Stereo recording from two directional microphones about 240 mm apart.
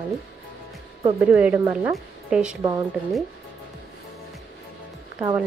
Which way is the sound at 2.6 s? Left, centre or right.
Centre.